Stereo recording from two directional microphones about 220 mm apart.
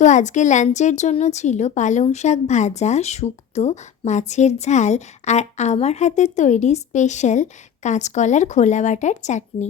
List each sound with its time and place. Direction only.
0.0 s a woman's voice: 35° left (ahead or behind)